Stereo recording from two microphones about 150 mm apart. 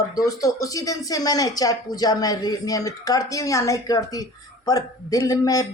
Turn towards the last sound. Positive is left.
turn(degrees=25)  # may be behind; listen again after turning